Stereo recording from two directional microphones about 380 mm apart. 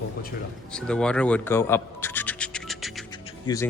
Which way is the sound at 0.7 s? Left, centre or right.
Centre.